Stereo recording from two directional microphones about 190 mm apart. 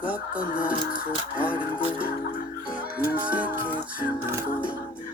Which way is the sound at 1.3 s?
5° right (ahead or behind).